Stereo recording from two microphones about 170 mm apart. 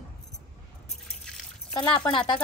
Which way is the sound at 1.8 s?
25° left (ahead or behind).